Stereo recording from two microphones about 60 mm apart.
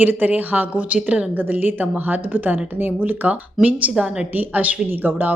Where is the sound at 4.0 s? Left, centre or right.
Centre.